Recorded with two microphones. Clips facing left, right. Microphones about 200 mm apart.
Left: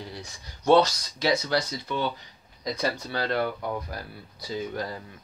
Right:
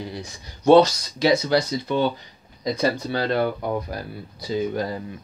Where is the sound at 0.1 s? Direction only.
20° right (ahead or behind).